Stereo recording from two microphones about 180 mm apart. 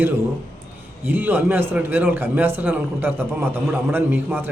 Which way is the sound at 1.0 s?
10° right (ahead or behind).